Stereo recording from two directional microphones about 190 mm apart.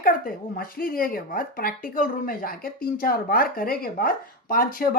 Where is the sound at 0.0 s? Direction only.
50° left (ahead or behind).